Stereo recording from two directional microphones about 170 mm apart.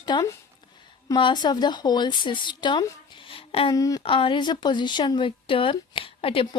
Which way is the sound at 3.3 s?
30° left (ahead or behind).